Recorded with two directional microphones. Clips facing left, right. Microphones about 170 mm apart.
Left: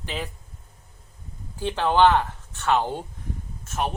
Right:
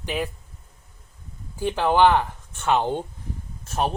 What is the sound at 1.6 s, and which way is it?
Speech, 10° right (ahead or behind).